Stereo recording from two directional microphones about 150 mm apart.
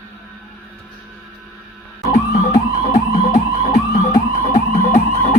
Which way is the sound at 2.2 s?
25° left (ahead or behind).